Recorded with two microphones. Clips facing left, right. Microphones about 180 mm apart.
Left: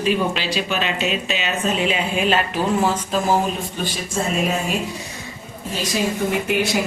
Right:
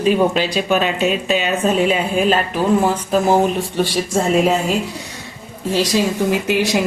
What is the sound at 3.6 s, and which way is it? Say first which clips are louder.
Speech: right 8 dB; 80° right.